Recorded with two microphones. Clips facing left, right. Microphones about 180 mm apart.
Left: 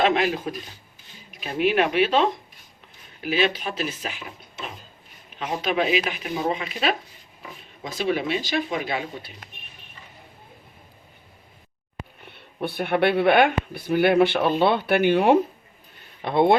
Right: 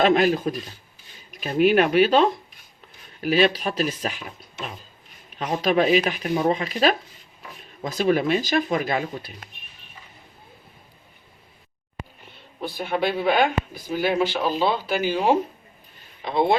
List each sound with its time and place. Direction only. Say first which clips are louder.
0.0 s speech: right 3 dB; 40° right (ahead or behind)
3.2 s speech: right 4 dB; 40° right (ahead or behind)
5.4 s speech: right 4 dB; 40° right (ahead or behind)
7.9 s speech: right 4 dB; 45° right (ahead or behind)
12.3 s speech: left 3 dB; 65° left (ahead or behind)